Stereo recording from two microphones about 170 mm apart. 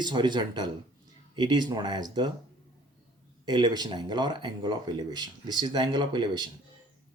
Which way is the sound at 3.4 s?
25° right (ahead or behind).